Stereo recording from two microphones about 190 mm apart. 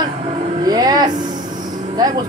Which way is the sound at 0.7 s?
20° right (ahead or behind).